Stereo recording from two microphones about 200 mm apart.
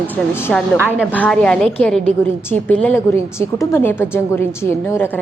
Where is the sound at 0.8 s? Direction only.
10° right (ahead or behind).